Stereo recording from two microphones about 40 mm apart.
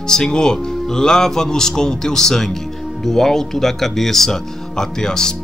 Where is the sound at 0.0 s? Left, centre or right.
Centre.